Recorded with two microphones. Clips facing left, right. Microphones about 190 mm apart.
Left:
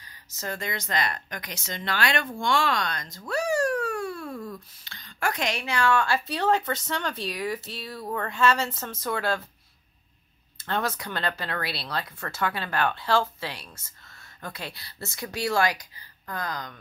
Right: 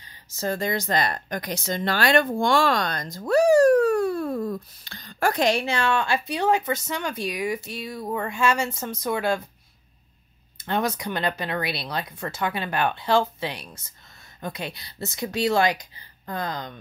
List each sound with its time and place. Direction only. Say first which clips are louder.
0.0 s speech: right 7 dB; 25° right (ahead or behind)
10.6 s speech: right 4 dB; 15° right (ahead or behind)